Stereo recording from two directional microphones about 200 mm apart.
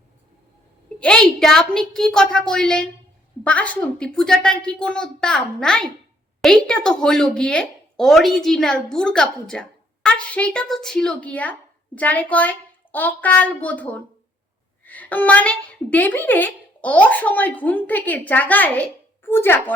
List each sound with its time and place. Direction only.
0.9 s a woman's voice: 5° left (ahead or behind)